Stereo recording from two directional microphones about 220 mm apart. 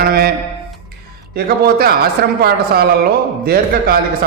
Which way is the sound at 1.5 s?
45° right (ahead or behind).